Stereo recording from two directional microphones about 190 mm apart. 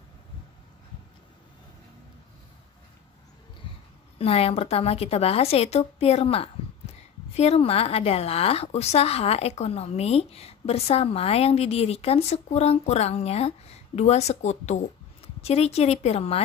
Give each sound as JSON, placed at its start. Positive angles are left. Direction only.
{"t": 4.2, "sound": "a woman's voice", "side_deg": 30}